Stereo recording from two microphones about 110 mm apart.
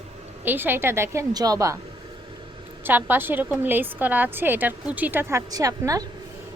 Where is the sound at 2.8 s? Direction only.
20° right (ahead or behind).